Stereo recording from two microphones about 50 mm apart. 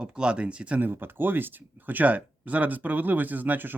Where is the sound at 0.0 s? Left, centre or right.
Centre.